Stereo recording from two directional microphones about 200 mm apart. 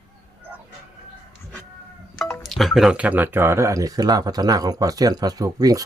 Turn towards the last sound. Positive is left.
turn(degrees=-20)  # may be behind; listen again after turning